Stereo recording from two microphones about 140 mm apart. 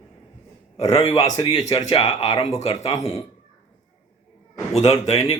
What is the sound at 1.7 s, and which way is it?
Speech, 25° left (ahead or behind).